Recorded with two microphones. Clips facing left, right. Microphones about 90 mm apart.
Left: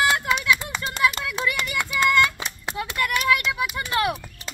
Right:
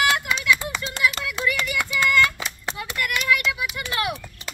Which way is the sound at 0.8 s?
35° left (ahead or behind).